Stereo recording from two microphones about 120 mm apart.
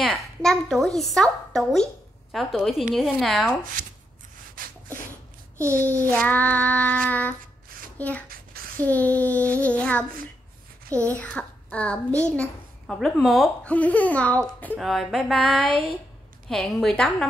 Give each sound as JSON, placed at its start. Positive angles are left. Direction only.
{"t": 0.0, "sound": "a woman's voice", "side_deg": 0}
{"t": 5.6, "sound": "a child's voice", "side_deg": -20}
{"t": 6.0, "sound": "child singing", "side_deg": 15}
{"t": 10.9, "sound": "a child's voice", "side_deg": -25}
{"t": 11.1, "sound": "a child's voice", "side_deg": 10}
{"t": 13.7, "sound": "child singing", "side_deg": 10}
{"t": 14.8, "sound": "a woman's voice", "side_deg": 0}